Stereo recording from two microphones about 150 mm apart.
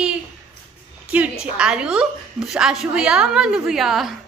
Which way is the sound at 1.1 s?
10° right (ahead or behind).